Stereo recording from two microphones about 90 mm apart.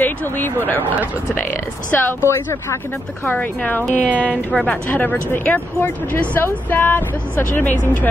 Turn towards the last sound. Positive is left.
turn(degrees=20)  # may be behind; listen again after turning